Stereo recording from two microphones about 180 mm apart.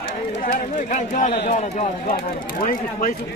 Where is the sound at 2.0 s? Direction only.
55° left (ahead or behind).